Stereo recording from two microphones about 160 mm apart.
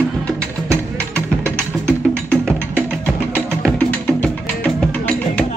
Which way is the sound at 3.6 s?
10° left (ahead or behind).